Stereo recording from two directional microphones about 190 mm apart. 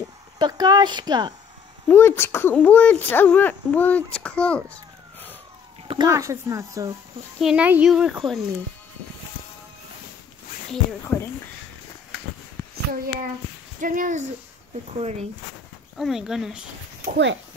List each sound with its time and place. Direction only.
0.4 s speech: 20° right (ahead or behind)
1.9 s speech: 10° left (ahead or behind)
5.9 s speech: 20° right (ahead or behind)
7.3 s speech: 5° right (ahead or behind)
11.1 s speech: centre (ahead or behind)
12.9 s speech: 50° right (ahead or behind)
16.0 s speech: centre (ahead or behind)
17.1 s speech: 70° right (ahead or behind)